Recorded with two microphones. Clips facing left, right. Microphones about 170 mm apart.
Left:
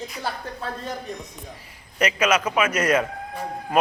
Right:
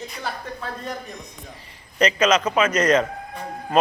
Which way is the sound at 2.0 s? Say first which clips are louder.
Right 3 dB; 10° left (ahead or behind).